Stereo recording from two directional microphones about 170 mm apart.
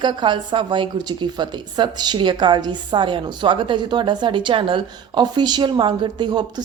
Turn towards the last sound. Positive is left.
turn(degrees=-25)  # may be behind; listen again after turning